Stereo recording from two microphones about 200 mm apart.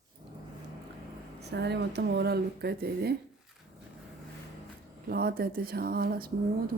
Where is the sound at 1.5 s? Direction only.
55° right (ahead or behind).